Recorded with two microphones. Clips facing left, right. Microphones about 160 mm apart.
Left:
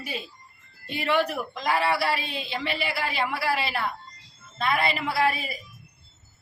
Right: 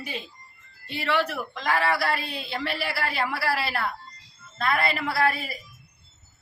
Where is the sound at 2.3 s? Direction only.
15° left (ahead or behind).